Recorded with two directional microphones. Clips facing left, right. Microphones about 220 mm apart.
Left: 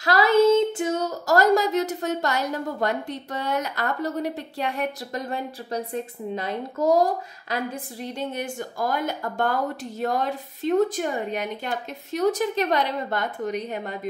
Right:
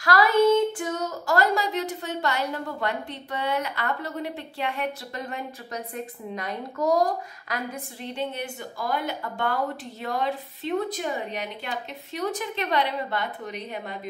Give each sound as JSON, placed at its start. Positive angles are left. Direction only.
{"t": 0.0, "sound": "child singing", "side_deg": 25}
{"t": 1.2, "sound": "a woman's voice", "side_deg": 45}
{"t": 8.0, "sound": "speech", "side_deg": 40}